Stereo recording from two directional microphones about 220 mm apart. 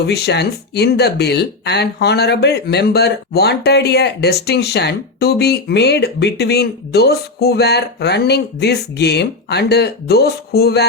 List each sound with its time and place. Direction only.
0.0 s speech: 50° left (ahead or behind)